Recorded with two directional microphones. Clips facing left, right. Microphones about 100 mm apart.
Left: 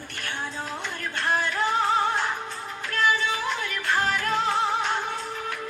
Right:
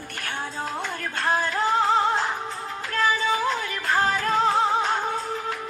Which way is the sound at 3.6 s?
40° right (ahead or behind).